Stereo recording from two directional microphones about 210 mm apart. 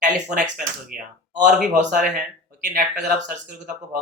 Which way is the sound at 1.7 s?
35° right (ahead or behind).